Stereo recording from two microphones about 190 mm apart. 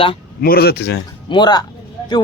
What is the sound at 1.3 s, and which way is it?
Speech, 25° left (ahead or behind).